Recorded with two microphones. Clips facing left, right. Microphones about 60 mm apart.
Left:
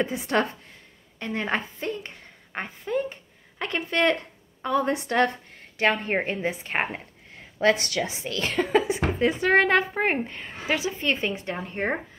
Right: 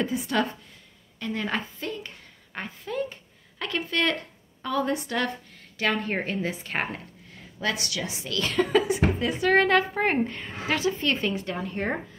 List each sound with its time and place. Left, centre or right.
0.0 s a woman's voice: left
5.0 s a woman's voice: left
7.6 s a woman's voice: left
9.9 s a woman's voice: centre